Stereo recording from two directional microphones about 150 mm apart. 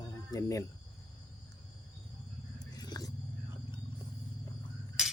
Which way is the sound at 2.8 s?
25° left (ahead or behind).